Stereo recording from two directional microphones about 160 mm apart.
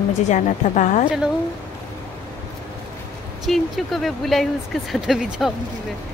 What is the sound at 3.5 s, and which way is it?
Speech, centre (ahead or behind).